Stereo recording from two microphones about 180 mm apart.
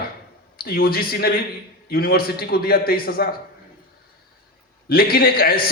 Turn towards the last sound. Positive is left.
turn(degrees=55)  # may be behind; listen again after turning